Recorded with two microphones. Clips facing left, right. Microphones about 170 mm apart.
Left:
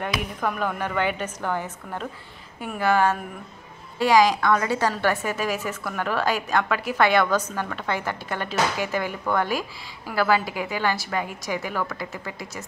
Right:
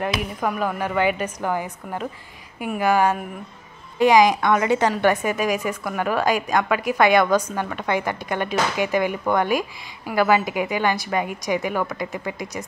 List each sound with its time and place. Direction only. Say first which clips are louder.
0.2 s a woman's voice: right 2 dB; 5° right (ahead or behind)